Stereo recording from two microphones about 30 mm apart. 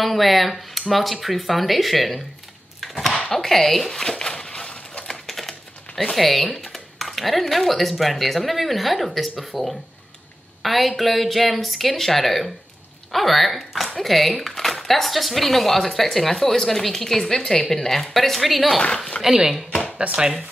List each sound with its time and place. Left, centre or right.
0.0 s speech: centre
3.3 s speech: centre
4.0 s a sound: centre
5.2 s typewriter: centre
6.1 s speech: centre
19.2 s speech: centre
20.0 s speech: right